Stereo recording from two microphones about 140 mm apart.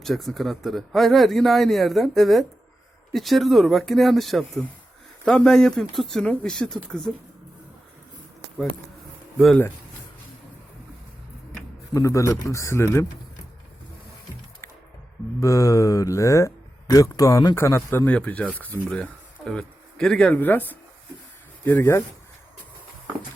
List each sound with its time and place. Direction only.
0.0 s speech: centre (ahead or behind)
11.9 s speech: 20° left (ahead or behind)
15.4 s speech: 20° left (ahead or behind)